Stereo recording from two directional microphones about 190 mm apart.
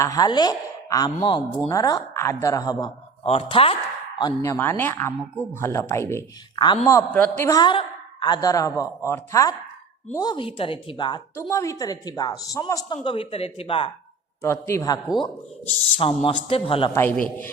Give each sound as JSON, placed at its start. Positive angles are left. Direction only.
{"t": 0.0, "sound": "a woman's voice", "side_deg": 20}
{"t": 3.2, "sound": "a woman's voice", "side_deg": 30}
{"t": 4.2, "sound": "a man's voice", "side_deg": 20}
{"t": 14.4, "sound": "a man's voice", "side_deg": 15}
{"t": 15.9, "sound": "a woman's voice", "side_deg": 30}
{"t": 16.9, "sound": "a man's voice", "side_deg": 10}